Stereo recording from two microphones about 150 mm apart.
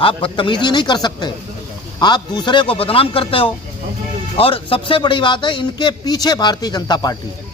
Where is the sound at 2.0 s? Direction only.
30° left (ahead or behind).